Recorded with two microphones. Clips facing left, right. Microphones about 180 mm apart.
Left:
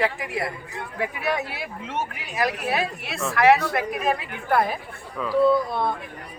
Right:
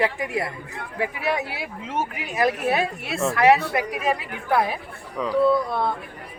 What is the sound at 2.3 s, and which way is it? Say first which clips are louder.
Speech: right 3 dB; 20° right (ahead or behind).